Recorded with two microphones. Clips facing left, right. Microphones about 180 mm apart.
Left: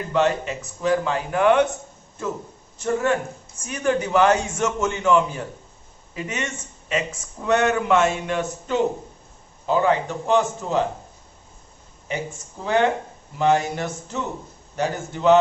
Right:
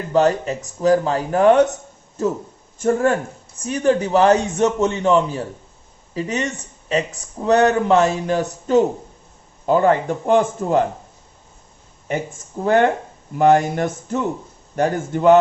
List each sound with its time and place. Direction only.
0.1 s speech: 40° right (ahead or behind)
3.6 s speech: 35° right (ahead or behind); by 10.8 s 50° right (ahead or behind)
12.6 s speech: 50° right (ahead or behind)